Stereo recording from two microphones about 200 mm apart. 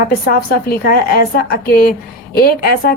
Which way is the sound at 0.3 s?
45° left (ahead or behind).